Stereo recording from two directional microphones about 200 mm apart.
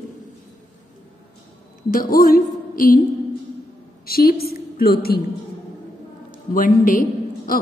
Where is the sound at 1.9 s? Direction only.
45° left (ahead or behind).